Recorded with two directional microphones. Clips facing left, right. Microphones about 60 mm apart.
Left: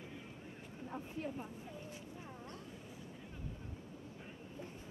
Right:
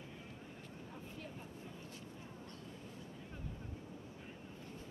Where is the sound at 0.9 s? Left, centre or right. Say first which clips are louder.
Left 9 dB; left.